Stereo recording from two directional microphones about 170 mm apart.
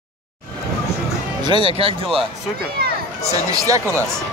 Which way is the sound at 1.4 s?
30° right (ahead or behind).